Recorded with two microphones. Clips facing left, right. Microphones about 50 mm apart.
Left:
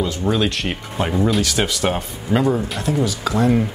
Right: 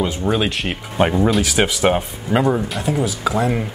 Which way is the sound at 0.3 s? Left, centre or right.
Centre.